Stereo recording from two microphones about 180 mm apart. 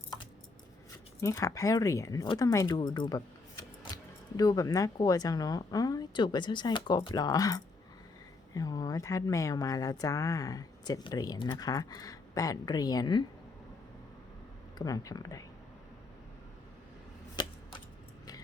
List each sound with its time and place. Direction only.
1.2 s speech: 15° left (ahead or behind)
14.8 s speech: 20° left (ahead or behind)
17.4 s a sound: 25° left (ahead or behind)